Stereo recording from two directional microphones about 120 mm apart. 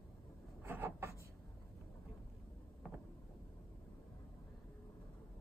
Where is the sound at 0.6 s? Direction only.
20° right (ahead or behind).